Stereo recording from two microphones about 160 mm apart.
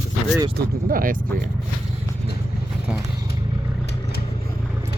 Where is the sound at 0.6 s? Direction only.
65° right (ahead or behind).